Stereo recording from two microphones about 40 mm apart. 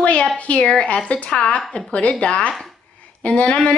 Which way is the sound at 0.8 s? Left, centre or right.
Left.